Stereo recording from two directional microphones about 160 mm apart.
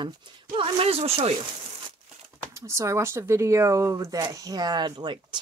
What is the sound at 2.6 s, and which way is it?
Speech, 20° right (ahead or behind).